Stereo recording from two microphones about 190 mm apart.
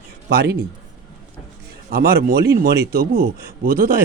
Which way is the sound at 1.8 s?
55° right (ahead or behind).